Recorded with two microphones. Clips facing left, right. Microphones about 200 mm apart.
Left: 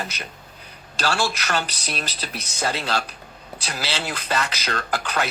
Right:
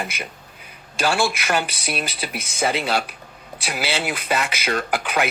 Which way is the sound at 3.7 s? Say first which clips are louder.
Right 4 dB; 15° right (ahead or behind).